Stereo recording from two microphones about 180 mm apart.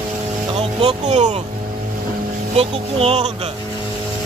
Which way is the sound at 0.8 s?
40° right (ahead or behind).